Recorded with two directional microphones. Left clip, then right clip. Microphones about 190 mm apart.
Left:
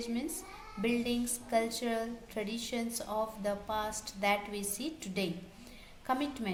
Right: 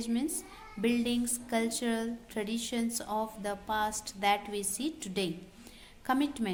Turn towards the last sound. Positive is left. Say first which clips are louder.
# right 3 dB
turn(degrees=-35)  # may be behind; listen again after turning